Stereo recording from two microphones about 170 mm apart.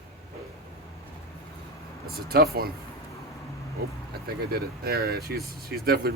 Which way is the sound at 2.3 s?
65° right (ahead or behind).